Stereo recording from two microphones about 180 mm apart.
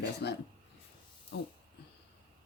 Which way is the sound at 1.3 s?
65° left (ahead or behind).